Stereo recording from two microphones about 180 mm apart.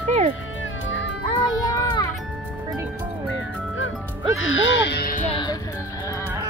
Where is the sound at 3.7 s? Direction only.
90° left; by 5.2 s 55° left (ahead or behind).